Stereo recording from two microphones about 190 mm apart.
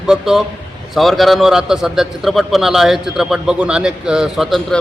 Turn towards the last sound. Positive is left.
turn(degrees=0)  # may be behind; listen again after turning